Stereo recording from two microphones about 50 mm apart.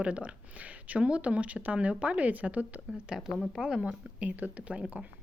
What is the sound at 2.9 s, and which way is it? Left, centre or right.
Speech, centre.